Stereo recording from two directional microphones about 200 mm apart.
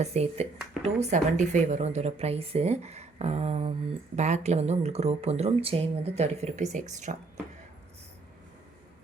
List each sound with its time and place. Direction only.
0.0 s speech: 30° right (ahead or behind)